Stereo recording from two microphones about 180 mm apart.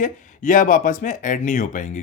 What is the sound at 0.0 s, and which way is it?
Speech, 45° left (ahead or behind).